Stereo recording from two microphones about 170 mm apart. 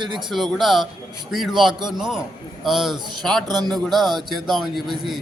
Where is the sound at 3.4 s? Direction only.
25° right (ahead or behind).